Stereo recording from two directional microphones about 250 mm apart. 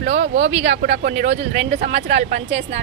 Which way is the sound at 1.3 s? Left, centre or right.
Right.